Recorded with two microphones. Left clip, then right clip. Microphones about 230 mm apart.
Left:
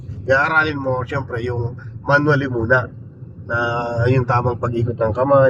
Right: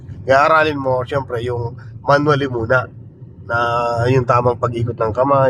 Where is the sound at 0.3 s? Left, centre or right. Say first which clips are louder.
Right 4 dB; right.